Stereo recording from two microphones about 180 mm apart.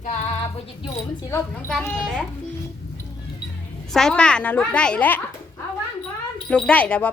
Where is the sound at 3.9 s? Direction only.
5° left (ahead or behind).